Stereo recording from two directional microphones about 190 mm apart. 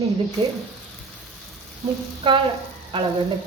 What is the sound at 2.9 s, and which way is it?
Speech, 25° right (ahead or behind).